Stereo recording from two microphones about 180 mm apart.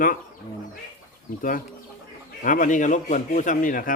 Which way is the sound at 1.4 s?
50° left (ahead or behind).